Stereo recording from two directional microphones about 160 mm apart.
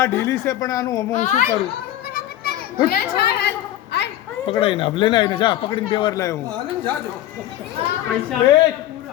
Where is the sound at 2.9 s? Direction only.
90° left.